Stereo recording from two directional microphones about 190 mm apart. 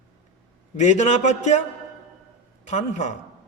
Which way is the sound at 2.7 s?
40° left (ahead or behind).